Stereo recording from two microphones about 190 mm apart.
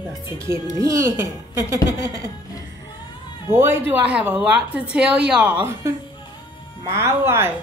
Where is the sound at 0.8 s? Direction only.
15° right (ahead or behind).